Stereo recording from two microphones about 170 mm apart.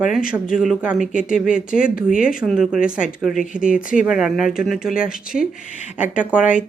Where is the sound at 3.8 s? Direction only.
50° left (ahead or behind).